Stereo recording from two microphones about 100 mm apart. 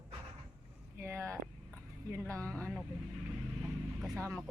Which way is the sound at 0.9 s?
25° right (ahead or behind).